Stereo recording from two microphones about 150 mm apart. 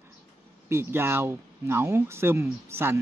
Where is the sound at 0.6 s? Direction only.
15° right (ahead or behind).